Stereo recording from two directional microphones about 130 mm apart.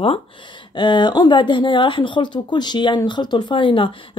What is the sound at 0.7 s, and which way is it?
Speech, 35° left (ahead or behind).